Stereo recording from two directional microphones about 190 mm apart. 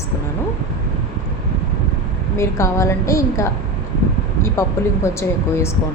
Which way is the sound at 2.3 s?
15° left (ahead or behind).